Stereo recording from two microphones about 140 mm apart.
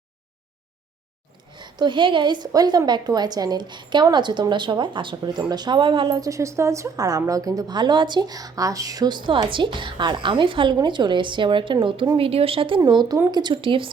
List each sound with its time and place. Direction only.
1.5 s a woman's voice: 30° right (ahead or behind)
12.8 s speech: 30° right (ahead or behind)
13.4 s a woman's voice: 35° right (ahead or behind)